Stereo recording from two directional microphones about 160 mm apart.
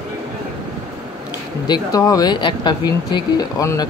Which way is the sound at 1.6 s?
25° left (ahead or behind).